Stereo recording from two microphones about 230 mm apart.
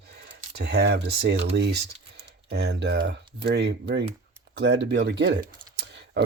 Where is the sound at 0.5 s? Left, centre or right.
Right.